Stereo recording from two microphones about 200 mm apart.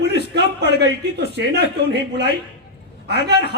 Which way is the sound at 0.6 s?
55° right (ahead or behind).